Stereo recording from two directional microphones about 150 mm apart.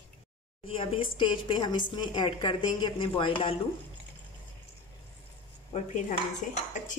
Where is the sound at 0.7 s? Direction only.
35° left (ahead or behind).